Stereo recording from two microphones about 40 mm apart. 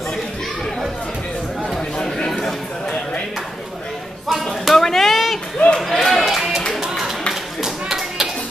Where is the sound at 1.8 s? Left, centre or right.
Centre.